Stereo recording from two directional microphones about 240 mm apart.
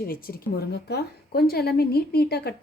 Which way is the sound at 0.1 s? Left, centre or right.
Left.